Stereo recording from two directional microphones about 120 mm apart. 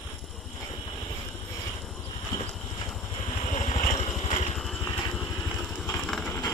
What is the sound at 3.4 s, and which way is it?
Vehicle, 80° left.